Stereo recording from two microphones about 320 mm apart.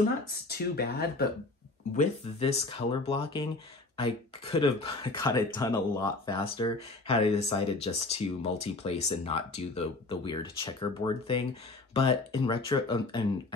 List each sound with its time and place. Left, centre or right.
0.5 s speech: left
2.0 s speech: centre